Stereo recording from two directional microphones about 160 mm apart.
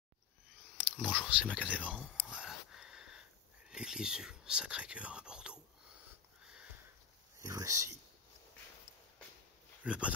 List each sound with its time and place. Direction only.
0.8 s speech: 5° right (ahead or behind)
2.0 s a sound: 5° right (ahead or behind)
3.7 s speech: 5° right (ahead or behind)
6.4 s sniff: 5° right (ahead or behind)
7.3 s speech: 20° right (ahead or behind)
9.8 s speech: 5° right (ahead or behind)